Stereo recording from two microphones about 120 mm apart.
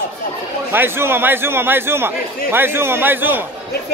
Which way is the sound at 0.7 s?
20° right (ahead or behind).